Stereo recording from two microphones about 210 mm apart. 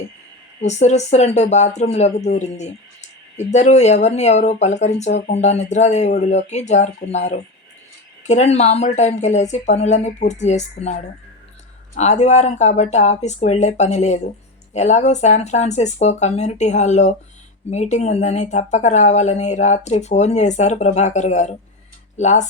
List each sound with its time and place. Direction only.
0.6 s speech: 35° left (ahead or behind)